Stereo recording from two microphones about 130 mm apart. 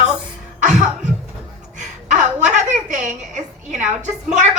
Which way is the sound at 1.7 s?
70° right (ahead or behind).